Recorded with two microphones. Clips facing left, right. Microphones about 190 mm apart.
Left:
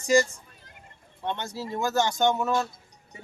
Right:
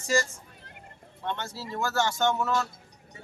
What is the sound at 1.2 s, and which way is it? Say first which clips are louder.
Speech: left 3 dB; 15° left (ahead or behind).